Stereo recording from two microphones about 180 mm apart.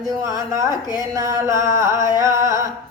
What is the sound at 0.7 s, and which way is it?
Mantra, 20° left (ahead or behind).